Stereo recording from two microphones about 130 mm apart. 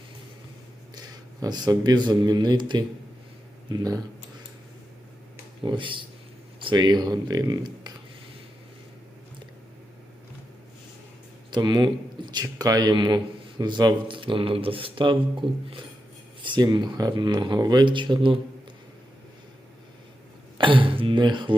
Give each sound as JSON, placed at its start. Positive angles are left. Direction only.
{"t": 0.9, "sound": "speech", "side_deg": -30}
{"t": 5.6, "sound": "a man's voice", "side_deg": -40}
{"t": 11.5, "sound": "a man's voice", "side_deg": -35}
{"t": 20.6, "sound": "throat clearing", "side_deg": -40}